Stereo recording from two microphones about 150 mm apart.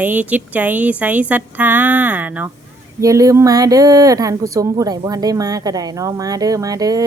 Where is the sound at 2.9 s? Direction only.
20° right (ahead or behind).